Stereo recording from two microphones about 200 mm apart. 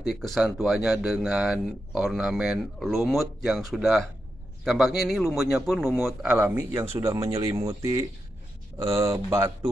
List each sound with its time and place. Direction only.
0.0 s speech: centre (ahead or behind)